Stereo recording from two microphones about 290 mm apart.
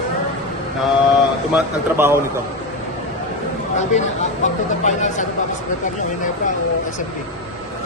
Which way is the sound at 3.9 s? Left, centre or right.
Left.